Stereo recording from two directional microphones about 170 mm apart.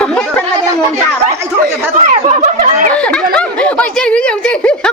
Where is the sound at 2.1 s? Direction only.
45° right (ahead or behind).